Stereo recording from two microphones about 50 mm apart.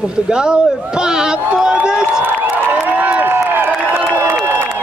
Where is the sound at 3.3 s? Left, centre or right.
Right.